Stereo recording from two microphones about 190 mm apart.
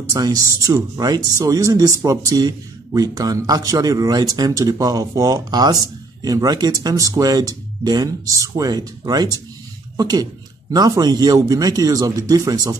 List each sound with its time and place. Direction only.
0.1 s speech: 20° right (ahead or behind)